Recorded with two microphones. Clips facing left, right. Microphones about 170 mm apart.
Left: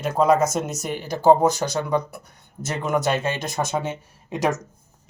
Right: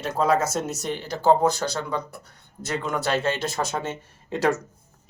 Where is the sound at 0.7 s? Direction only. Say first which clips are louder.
Left 2 dB; 15° left (ahead or behind).